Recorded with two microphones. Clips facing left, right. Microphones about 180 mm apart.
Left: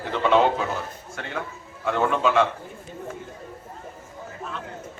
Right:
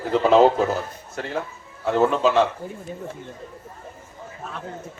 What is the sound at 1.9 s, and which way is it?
Speech, 35° right (ahead or behind).